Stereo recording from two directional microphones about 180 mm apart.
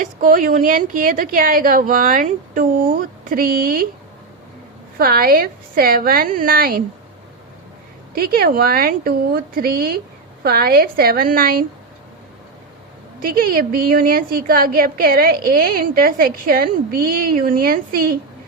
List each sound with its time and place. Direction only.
0.0 s a woman's voice: 50° right (ahead or behind)
4.9 s a woman's voice: 55° right (ahead or behind)
8.1 s a woman's voice: 55° right (ahead or behind)
13.1 s a woman's voice: 55° right (ahead or behind)